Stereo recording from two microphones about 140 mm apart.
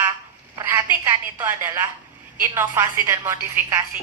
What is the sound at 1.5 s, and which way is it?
A woman's voice, 20° right (ahead or behind).